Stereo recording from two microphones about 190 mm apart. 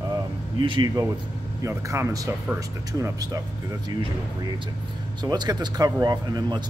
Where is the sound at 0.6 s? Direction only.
25° right (ahead or behind).